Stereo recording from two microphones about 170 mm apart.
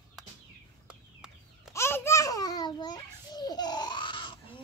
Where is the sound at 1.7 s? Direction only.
15° left (ahead or behind).